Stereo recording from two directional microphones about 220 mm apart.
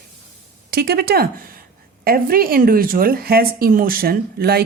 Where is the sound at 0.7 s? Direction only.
45° right (ahead or behind).